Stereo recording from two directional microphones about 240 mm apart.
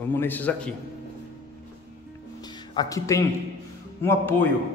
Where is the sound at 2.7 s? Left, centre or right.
Centre.